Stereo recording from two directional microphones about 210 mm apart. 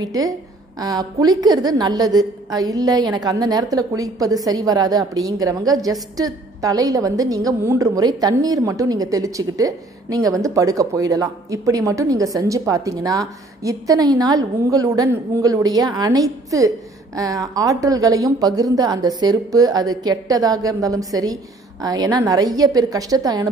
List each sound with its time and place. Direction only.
0.0 s a woman's voice: 15° right (ahead or behind)